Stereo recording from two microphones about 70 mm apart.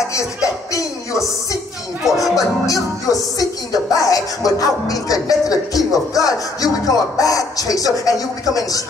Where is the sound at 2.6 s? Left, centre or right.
Left.